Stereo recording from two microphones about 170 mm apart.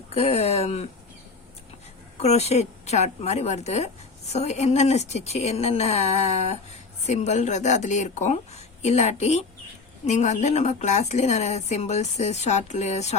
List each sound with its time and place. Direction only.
0.1 s a woman's voice: 35° left (ahead or behind)
2.1 s a woman's voice: 40° left (ahead or behind)